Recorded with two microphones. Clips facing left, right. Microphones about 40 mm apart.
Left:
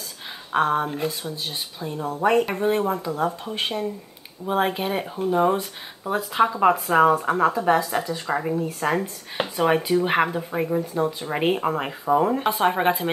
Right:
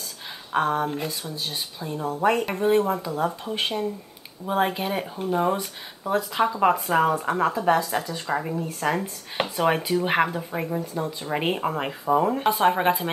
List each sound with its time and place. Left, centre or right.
0.5 s speech: centre
0.8 s speech: centre